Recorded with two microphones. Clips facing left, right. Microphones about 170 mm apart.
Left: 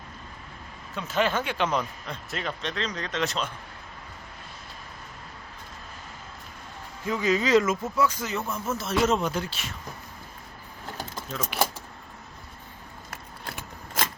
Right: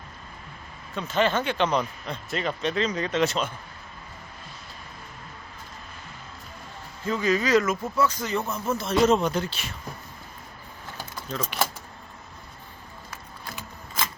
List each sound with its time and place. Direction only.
0.9 s speech: 5° left (ahead or behind)
7.0 s speech: 15° left (ahead or behind)
7.9 s speech: 10° left (ahead or behind)
13.1 s keys jangling: 65° left (ahead or behind)